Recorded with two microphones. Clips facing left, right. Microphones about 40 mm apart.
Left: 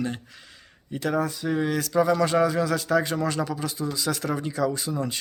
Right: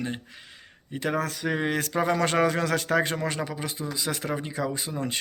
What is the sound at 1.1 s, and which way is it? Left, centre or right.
Speech, right.